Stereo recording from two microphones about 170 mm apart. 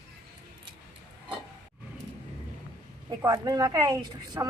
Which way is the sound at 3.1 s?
20° right (ahead or behind).